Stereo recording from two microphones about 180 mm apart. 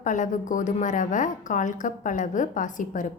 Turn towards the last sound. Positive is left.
turn(degrees=45)  # may be behind; listen again after turning